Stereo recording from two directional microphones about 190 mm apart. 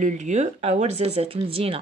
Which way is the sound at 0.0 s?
40° right (ahead or behind).